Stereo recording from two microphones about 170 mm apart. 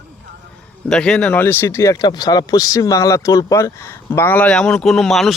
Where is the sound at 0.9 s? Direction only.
5° left (ahead or behind).